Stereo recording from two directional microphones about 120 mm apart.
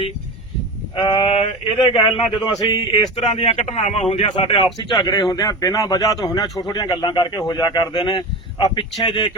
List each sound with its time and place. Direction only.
1.0 s a sound: 50° left (ahead or behind)
2.3 s a man's voice: 40° left (ahead or behind); by 4.0 s 65° left (ahead or behind)
4.1 s speech: 50° left (ahead or behind)